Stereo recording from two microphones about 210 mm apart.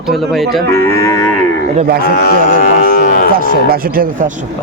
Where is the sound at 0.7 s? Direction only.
10° left (ahead or behind).